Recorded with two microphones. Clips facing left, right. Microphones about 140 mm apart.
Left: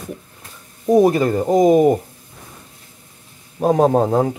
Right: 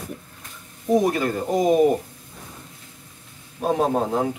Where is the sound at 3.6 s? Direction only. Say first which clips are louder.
Left 7 dB; 45° left (ahead or behind).